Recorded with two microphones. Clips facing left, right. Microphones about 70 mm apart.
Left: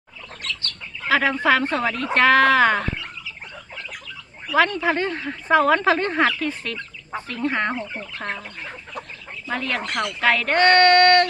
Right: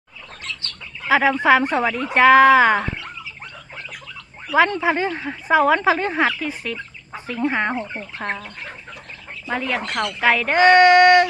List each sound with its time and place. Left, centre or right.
0.4 s chicken: right
2.1 s speech: centre
4.5 s speech: centre
9.5 s speech: centre